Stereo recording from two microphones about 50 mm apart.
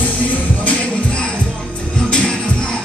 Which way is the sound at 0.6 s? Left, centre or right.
Left.